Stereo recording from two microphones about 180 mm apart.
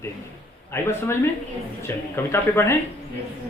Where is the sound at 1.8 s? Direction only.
15° left (ahead or behind).